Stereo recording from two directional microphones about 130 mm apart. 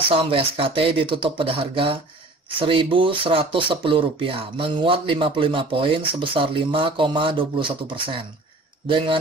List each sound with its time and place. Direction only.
0.1 s speech: 45° right (ahead or behind)